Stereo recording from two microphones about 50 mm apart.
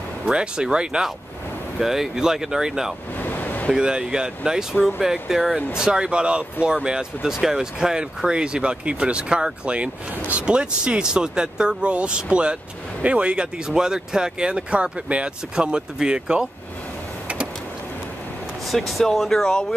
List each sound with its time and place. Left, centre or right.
0.3 s speech: centre
3.2 s a sound: left
3.7 s speech: centre
18.7 s speech: centre